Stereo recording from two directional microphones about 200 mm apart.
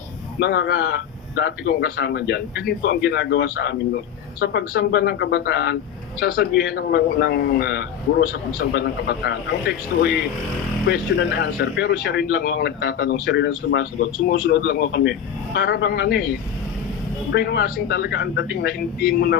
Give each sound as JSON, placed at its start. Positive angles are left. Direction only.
{"t": 0.3, "sound": "a man's voice", "side_deg": 60}
{"t": 17.3, "sound": "a man's voice", "side_deg": 55}